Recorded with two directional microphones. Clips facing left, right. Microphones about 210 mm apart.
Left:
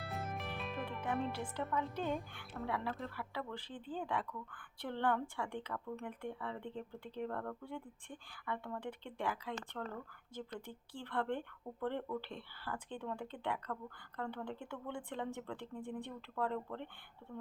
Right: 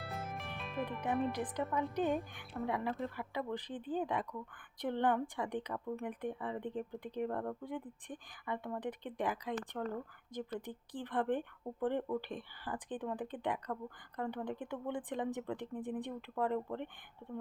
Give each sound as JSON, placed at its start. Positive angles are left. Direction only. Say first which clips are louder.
{"t": 0.0, "sound": "music", "louder": "even", "side_deg": 0}
{"t": 1.3, "sound": "speech", "louder": "right 3 dB", "side_deg": -15}